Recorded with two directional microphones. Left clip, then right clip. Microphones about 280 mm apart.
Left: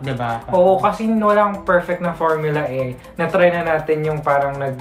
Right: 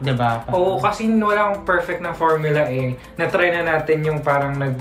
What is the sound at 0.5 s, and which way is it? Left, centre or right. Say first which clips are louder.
Speech: left 7 dB; centre.